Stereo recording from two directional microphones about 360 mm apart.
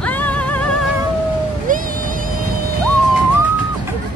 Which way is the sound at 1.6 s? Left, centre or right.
Right.